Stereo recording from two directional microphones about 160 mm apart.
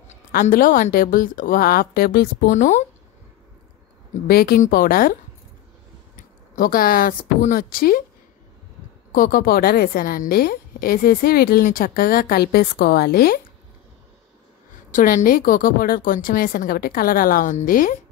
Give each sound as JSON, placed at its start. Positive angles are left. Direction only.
{"t": 0.3, "sound": "a woman's voice", "side_deg": 60}
{"t": 4.3, "sound": "a woman's voice", "side_deg": 75}
{"t": 6.1, "sound": "speech", "side_deg": 60}
{"t": 9.1, "sound": "a woman's voice", "side_deg": 60}
{"t": 14.9, "sound": "a woman's voice", "side_deg": 55}